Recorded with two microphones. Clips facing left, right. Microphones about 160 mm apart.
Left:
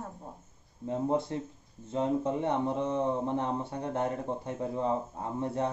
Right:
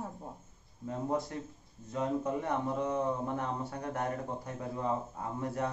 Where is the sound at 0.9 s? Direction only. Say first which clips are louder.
Left 4 dB; 25° left (ahead or behind).